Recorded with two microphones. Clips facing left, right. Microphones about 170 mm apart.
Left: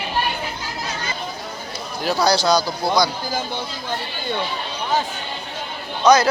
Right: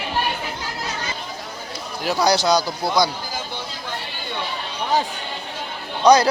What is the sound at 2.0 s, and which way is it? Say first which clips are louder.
Speech: even; 15° right (ahead or behind).